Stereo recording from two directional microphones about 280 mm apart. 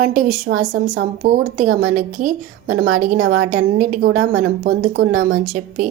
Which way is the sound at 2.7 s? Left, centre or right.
Right.